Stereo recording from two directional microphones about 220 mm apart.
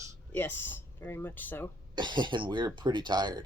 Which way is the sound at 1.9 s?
20° right (ahead or behind).